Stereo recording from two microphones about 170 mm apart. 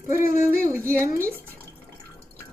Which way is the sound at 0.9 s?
15° right (ahead or behind).